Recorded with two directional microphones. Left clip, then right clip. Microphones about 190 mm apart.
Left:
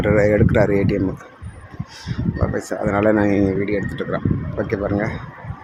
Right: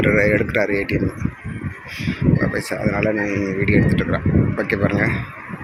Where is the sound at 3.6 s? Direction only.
10° left (ahead or behind).